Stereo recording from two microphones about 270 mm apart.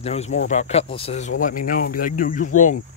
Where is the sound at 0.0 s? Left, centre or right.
Left.